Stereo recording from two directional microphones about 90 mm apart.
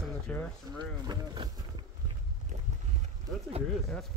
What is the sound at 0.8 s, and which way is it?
Speech, 50° right (ahead or behind).